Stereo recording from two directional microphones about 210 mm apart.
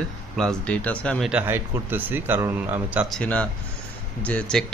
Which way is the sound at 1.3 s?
10° right (ahead or behind).